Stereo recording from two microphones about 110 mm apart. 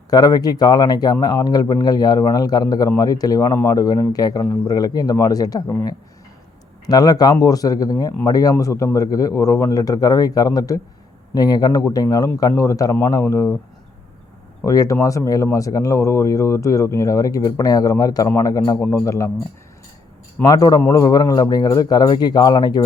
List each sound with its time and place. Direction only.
0.1 s speech: 35° left (ahead or behind)
14.6 s speech: 30° left (ahead or behind)
20.4 s speech: 35° left (ahead or behind)